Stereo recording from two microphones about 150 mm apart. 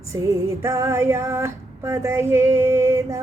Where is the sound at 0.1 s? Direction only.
20° right (ahead or behind).